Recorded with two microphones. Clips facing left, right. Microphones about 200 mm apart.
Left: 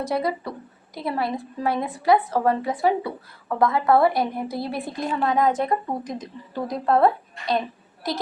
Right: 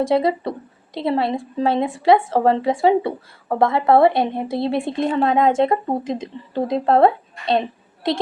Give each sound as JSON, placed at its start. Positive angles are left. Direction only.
{"t": 0.1, "sound": "a woman's voice", "side_deg": -25}